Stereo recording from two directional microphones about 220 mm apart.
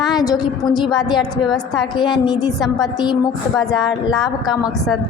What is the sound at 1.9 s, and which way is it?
A woman's voice, 20° left (ahead or behind).